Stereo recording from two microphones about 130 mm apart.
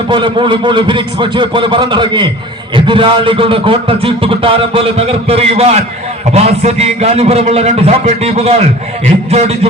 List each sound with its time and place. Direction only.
0.1 s a man's voice: 40° right (ahead or behind); by 9.6 s 55° right (ahead or behind)